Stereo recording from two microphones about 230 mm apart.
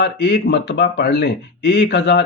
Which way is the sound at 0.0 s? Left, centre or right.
Left.